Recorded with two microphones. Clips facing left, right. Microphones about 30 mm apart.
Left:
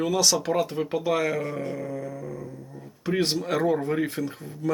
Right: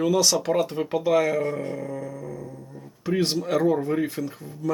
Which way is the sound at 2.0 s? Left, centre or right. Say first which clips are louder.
Even; centre.